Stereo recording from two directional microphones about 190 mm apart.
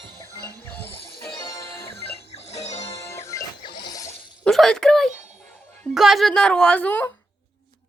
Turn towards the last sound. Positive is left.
turn(degrees=10)  # may be behind; listen again after turning